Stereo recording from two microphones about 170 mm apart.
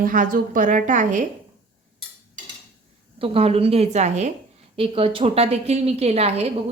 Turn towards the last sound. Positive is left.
turn(degrees=-35)  # may be behind; listen again after turning